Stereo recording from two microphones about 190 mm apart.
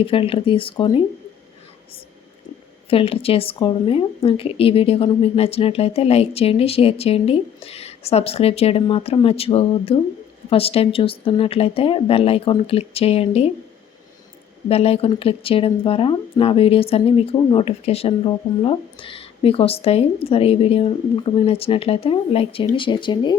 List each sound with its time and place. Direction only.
0.0 s speech: 30° left (ahead or behind)
2.9 s speech: 30° left (ahead or behind)
14.7 s speech: 30° left (ahead or behind)